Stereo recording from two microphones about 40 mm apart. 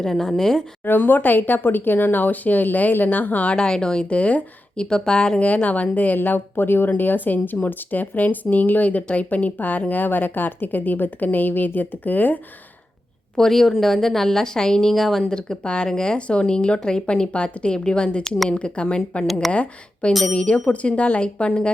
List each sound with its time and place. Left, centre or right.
0.0 s a woman's voice: centre
0.9 s speech: left
3.5 s speech: left
4.2 s speech: left
4.8 s speech: centre
5.6 s speech: left
6.1 s speech: left
13.3 s a woman's voice: centre
14.9 s a woman's voice: centre
15.3 s speech: left
18.2 s a woman's voice: centre
18.4 s speech: left